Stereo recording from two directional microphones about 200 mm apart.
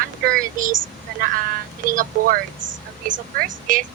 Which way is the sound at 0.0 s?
45° right (ahead or behind).